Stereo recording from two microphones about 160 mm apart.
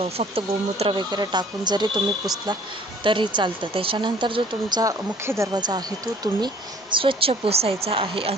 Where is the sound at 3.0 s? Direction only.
30° right (ahead or behind).